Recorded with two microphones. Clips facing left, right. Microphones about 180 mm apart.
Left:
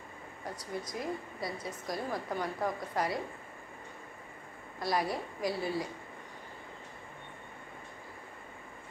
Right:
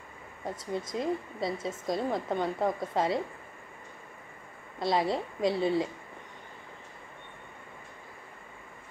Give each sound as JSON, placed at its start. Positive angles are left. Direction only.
{"t": 0.4, "sound": "a woman's voice", "side_deg": -25}
{"t": 4.7, "sound": "a woman's voice", "side_deg": -25}